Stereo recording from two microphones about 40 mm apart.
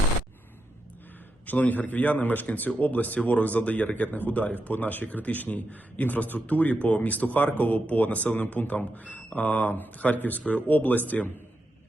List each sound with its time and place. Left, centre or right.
1.5 s a man's voice: left